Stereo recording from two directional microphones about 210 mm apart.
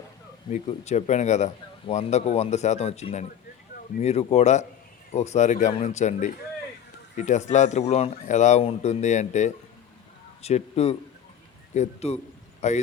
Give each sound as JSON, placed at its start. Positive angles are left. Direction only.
{"t": 0.5, "sound": "a man's voice", "side_deg": 35}